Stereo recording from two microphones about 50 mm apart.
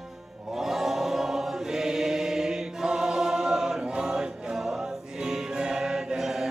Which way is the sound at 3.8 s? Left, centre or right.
Centre.